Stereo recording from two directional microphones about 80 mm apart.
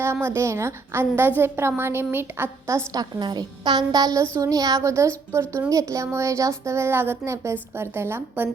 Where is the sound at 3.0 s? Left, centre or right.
Right.